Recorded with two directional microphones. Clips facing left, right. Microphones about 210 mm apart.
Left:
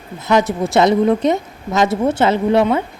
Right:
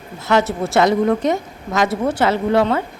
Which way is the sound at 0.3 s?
15° left (ahead or behind).